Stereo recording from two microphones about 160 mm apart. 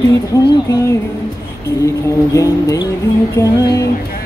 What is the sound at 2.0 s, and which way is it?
Music, 20° left (ahead or behind).